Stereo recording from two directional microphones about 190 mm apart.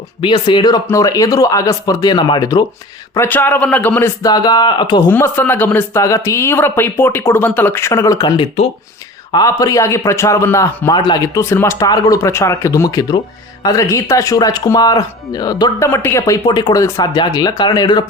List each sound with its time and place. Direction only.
0.2 s speech: 25° left (ahead or behind)
3.2 s a man's voice: 10° left (ahead or behind)
5.0 s a man's voice: 10° left (ahead or behind)